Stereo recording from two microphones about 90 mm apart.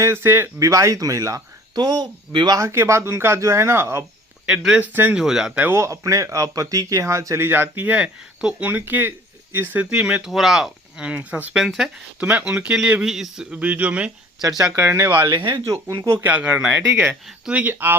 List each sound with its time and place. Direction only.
0.0 s speech: 25° right (ahead or behind)
1.7 s speech: 50° right (ahead or behind)
2.6 s speech: 35° right (ahead or behind)
4.4 s speech: 10° right (ahead or behind)
5.5 s speech: 20° right (ahead or behind)
5.8 s speech: 35° right (ahead or behind)
9.9 s speech: 10° right (ahead or behind)
11.5 s speech: 5° right (ahead or behind)
12.2 s speech: 15° right (ahead or behind)
14.8 s speech: 30° right (ahead or behind)
16.2 s speech: 15° right (ahead or behind)
17.5 s speech: 20° right (ahead or behind)